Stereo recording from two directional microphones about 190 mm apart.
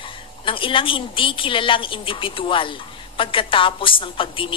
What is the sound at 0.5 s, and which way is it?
A woman's voice, 25° left (ahead or behind).